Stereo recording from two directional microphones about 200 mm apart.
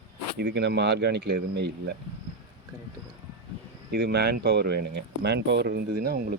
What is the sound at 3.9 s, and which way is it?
Speech, 55° right (ahead or behind).